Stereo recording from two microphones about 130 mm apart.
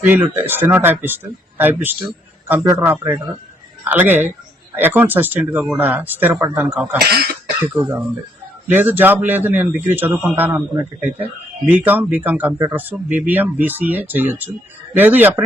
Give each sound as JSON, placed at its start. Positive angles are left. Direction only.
{"t": 0.0, "sound": "speech", "side_deg": -15}